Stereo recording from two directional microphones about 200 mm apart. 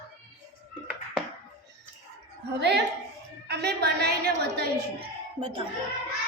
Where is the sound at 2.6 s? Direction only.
55° right (ahead or behind).